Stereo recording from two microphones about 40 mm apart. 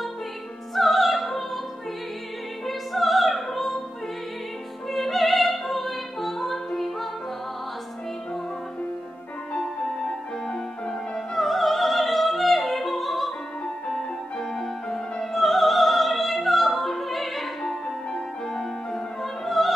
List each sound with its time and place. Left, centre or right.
0.7 s music: centre
2.6 s opera: centre
4.9 s opera: centre
9.6 s music: centre
11.3 s opera: centre
13.9 s music: centre
17.6 s music: centre
18.6 s music: centre